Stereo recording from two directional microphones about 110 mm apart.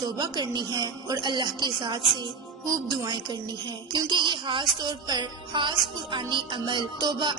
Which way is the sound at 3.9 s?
40° right (ahead or behind).